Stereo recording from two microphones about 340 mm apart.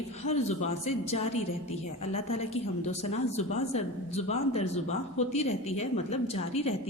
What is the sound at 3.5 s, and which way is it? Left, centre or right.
A woman's voice, centre.